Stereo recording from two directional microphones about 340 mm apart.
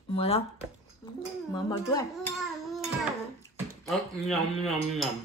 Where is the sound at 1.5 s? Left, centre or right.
Centre.